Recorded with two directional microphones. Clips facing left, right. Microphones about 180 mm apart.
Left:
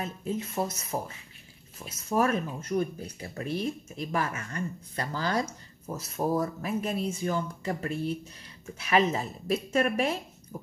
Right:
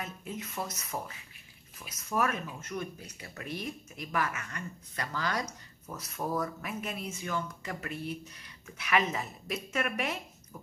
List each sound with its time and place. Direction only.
0.0 s speech: 30° left (ahead or behind)